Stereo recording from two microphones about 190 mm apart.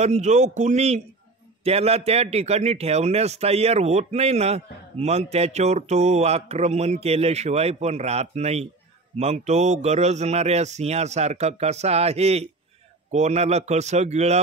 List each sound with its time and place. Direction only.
0.0 s a man's voice: 35° right (ahead or behind)